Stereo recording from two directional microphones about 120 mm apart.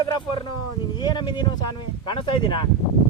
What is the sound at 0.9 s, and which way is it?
Speech, 40° left (ahead or behind).